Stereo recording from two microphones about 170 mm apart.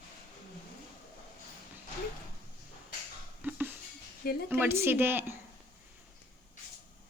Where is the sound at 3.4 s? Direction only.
10° right (ahead or behind).